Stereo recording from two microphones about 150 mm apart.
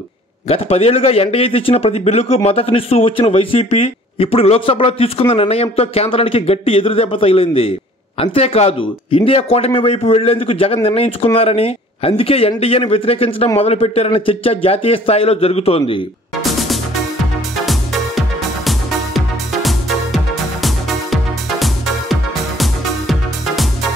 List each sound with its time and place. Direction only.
0.5 s a man's voice: 40° left (ahead or behind)
16.5 s music: centre (ahead or behind)